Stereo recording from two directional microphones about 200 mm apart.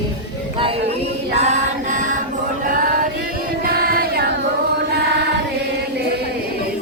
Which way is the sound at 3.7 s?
50° right (ahead or behind).